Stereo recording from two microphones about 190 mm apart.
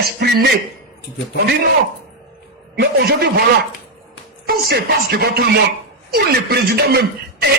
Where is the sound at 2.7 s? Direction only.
55° right (ahead or behind).